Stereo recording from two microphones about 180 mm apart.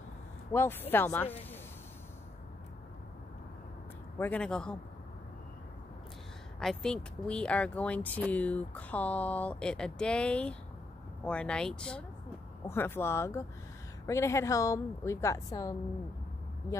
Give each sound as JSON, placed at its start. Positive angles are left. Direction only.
{"t": 0.5, "sound": "speech", "side_deg": 15}
{"t": 4.2, "sound": "speech", "side_deg": 5}
{"t": 6.6, "sound": "speech", "side_deg": 5}